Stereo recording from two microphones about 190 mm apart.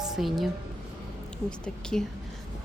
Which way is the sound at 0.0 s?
Centre (ahead or behind).